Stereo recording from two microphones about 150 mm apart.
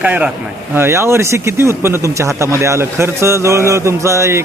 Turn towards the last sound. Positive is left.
turn(degrees=-20)  # may be behind; listen again after turning